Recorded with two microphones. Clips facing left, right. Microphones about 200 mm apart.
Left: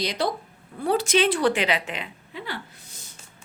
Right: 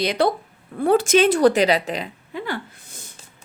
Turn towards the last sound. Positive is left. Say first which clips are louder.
# right 6 dB
turn(degrees=-50)  # may be behind; listen again after turning